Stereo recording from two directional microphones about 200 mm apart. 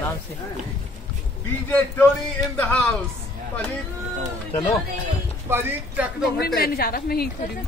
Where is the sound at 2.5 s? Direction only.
5° left (ahead or behind).